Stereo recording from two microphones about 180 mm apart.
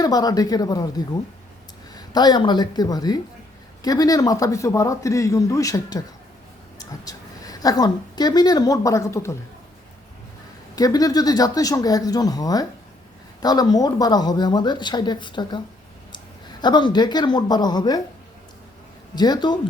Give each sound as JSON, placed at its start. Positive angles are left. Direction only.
{"t": 0.0, "sound": "a man's voice", "side_deg": 20}
{"t": 10.8, "sound": "speech", "side_deg": 20}
{"t": 19.1, "sound": "speech", "side_deg": 25}